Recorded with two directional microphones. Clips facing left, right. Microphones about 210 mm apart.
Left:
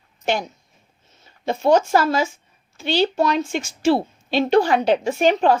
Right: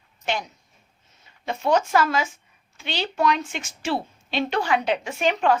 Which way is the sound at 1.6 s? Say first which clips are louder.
Left 4 dB; 35° left (ahead or behind).